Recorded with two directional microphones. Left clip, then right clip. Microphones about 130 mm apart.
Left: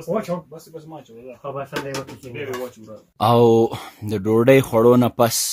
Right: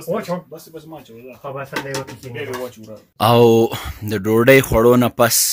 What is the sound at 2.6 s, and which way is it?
Speech, 5° left (ahead or behind).